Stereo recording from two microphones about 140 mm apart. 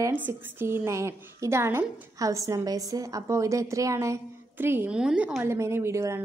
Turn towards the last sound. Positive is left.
turn(degrees=-20)  # may be behind; listen again after turning